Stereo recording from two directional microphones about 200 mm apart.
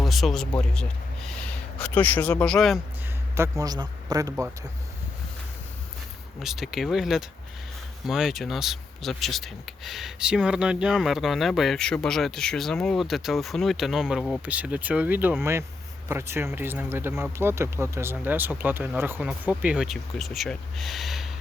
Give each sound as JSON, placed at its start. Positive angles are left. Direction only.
{"t": 0.0, "sound": "speech", "side_deg": 0}
{"t": 3.6, "sound": "speech", "side_deg": -20}
{"t": 6.4, "sound": "speech", "side_deg": 0}